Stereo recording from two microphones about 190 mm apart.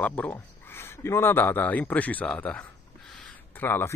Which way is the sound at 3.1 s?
10° left (ahead or behind).